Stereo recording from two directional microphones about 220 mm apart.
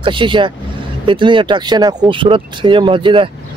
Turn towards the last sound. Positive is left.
turn(degrees=-25)  # may be behind; listen again after turning